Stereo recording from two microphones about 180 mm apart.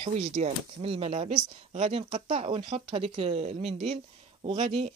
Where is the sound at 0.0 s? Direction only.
40° right (ahead or behind).